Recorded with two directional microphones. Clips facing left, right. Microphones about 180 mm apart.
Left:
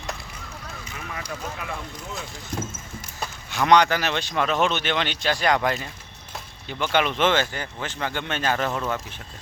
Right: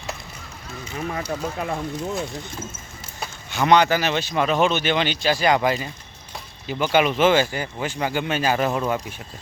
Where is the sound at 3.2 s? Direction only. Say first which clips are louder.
Right 2 dB; centre (ahead or behind).